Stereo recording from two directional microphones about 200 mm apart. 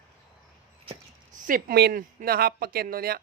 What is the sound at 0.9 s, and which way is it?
Speech, 40° right (ahead or behind).